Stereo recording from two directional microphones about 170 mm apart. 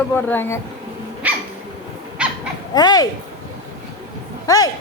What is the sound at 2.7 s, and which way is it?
Speech, 25° left (ahead or behind).